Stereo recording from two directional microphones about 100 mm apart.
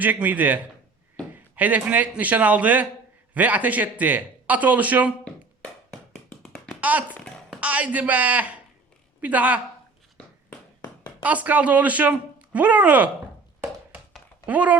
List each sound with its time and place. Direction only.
0.0 s speech: 15° right (ahead or behind)
6.4 s tap: 10° left (ahead or behind)
7.6 s speech: 15° right (ahead or behind)
11.2 s speech: 15° right (ahead or behind)
14.4 s speech: 15° right (ahead or behind)